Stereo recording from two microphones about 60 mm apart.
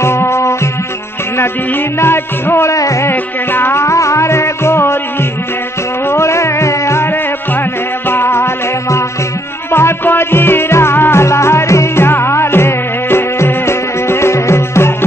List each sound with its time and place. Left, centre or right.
0.0 s music: left
2.0 s music: left
2.7 s music: left
3.1 s music: left
3.8 s music: left
6.0 s music: left
8.1 s music: left
9.7 s music: left